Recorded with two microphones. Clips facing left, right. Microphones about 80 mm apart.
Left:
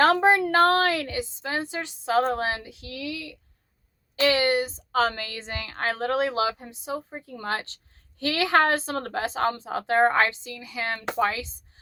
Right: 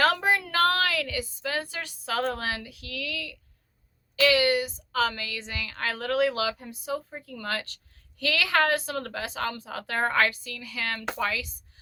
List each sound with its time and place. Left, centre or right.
0.0 s a woman's voice: left